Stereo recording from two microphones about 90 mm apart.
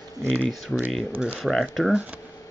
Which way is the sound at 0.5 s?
Centre (ahead or behind).